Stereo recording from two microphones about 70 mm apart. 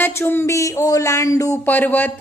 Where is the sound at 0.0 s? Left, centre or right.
Left.